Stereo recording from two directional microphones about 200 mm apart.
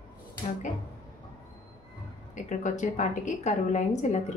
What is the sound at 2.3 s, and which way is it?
A woman's voice, 40° left (ahead or behind).